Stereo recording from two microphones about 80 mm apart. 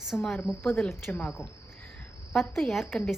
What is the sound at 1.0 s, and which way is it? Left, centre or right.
Speech, left.